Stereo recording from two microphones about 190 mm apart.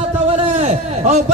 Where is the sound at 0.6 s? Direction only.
35° right (ahead or behind).